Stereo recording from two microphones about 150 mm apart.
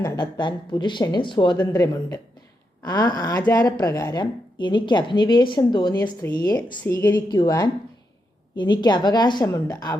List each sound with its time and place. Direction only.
0.0 s speech: 30° left (ahead or behind)
1.7 s a woman's voice: 20° left (ahead or behind)
5.9 s speech: 15° left (ahead or behind)
6.3 s a woman's voice: 25° left (ahead or behind)
6.8 s a woman's voice: 15° left (ahead or behind)